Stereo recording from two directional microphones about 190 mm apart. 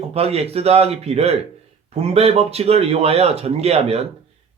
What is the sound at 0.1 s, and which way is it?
Speech, 35° right (ahead or behind).